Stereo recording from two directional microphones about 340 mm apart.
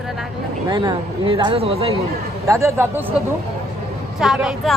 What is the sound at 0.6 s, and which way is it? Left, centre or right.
Speech, centre.